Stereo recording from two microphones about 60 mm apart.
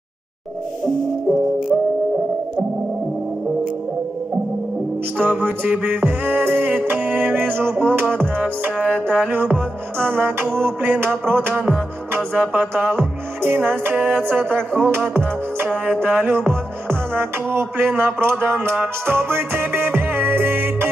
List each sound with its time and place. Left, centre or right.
5.1 s music: right